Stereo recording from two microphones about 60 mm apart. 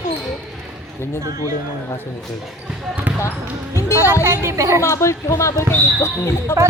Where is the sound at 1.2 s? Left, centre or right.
Right.